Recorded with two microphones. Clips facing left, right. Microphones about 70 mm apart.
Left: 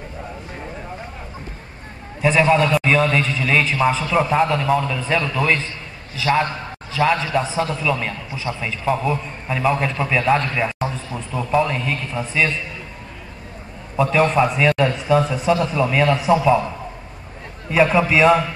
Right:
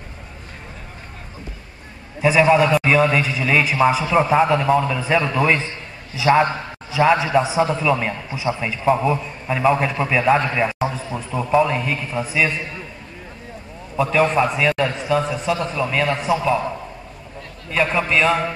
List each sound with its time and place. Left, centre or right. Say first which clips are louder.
2.4 s a man's voice: right 2 dB; centre
13.9 s a man's voice: left 1 dB; centre
17.6 s a man's voice: left 4 dB; centre